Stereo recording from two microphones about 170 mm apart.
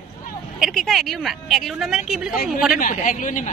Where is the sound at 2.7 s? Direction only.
50° left (ahead or behind).